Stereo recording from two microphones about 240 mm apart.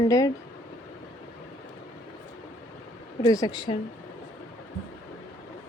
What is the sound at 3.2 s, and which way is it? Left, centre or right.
Speech, centre.